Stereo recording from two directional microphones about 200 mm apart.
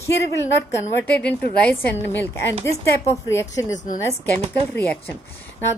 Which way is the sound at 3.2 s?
15° left (ahead or behind).